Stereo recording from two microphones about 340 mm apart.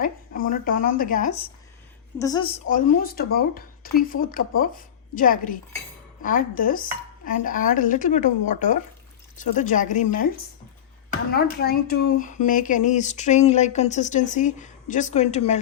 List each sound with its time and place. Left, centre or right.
0.0 s speech: left
11.3 s speech: left